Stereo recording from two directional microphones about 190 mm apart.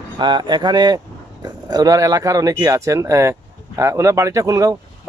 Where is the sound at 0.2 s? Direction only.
25° right (ahead or behind).